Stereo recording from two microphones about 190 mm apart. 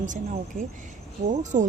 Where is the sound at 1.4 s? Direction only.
40° right (ahead or behind).